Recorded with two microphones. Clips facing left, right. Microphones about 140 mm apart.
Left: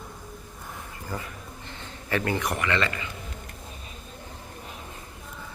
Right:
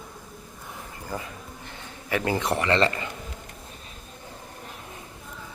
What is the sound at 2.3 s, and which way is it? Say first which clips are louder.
Speech: right 5 dB; 25° right (ahead or behind).